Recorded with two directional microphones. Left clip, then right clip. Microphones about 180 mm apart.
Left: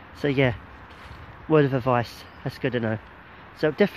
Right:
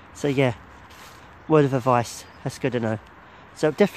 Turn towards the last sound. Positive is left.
turn(degrees=-20)  # may be behind; listen again after turning